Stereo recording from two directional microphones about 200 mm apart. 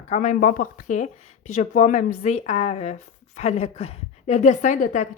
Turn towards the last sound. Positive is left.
turn(degrees=40)  # may be behind; listen again after turning